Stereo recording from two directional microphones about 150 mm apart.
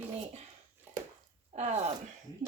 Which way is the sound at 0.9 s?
15° right (ahead or behind).